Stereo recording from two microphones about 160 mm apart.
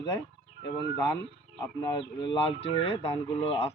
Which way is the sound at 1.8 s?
30° left (ahead or behind).